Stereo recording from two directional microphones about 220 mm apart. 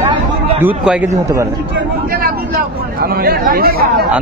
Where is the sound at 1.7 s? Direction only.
45° right (ahead or behind).